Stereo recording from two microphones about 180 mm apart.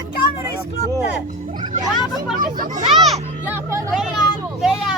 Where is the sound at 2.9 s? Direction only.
Centre (ahead or behind).